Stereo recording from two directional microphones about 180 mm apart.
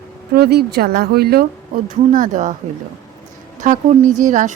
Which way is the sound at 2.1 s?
45° right (ahead or behind).